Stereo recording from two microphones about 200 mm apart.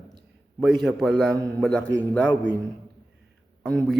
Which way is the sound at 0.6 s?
Centre (ahead or behind).